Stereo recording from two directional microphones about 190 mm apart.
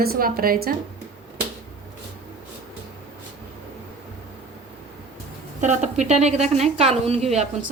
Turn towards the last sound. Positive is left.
turn(degrees=-35)  # may be behind; listen again after turning